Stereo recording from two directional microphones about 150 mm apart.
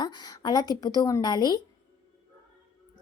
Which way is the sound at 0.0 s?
30° left (ahead or behind).